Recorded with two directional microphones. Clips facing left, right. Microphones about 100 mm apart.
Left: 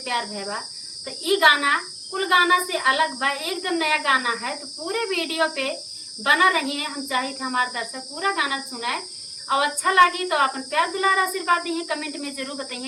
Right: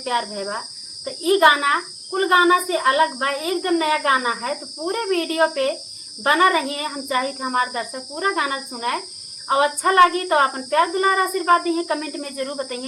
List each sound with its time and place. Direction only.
0.0 s speech: 35° right (ahead or behind)